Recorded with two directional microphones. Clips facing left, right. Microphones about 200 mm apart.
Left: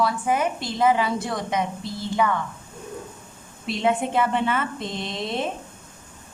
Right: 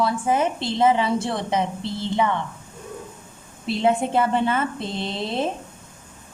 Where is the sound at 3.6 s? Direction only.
35° right (ahead or behind).